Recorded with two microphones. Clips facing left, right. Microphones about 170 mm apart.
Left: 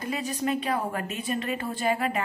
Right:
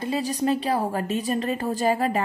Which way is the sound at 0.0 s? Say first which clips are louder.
Right 5 dB; 35° right (ahead or behind).